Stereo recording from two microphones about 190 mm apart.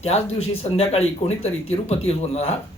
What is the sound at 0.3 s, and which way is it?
Speech, 30° left (ahead or behind).